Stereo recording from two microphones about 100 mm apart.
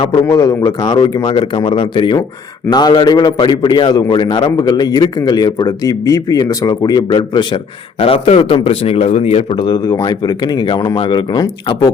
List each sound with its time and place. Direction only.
0.3 s a man's voice: 40° left (ahead or behind); by 2.1 s 55° left (ahead or behind)
2.6 s a man's voice: 45° left (ahead or behind)
7.9 s a man's voice: 70° left (ahead or behind)
9.6 s a man's voice: 40° left (ahead or behind)
10.9 s speech: 60° left (ahead or behind)
11.3 s speech: 40° left (ahead or behind)